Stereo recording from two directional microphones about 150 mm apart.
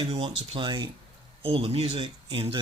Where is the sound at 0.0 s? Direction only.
40° right (ahead or behind).